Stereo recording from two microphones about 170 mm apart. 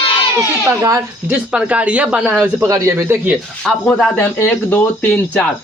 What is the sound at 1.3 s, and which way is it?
Speech, 5° right (ahead or behind).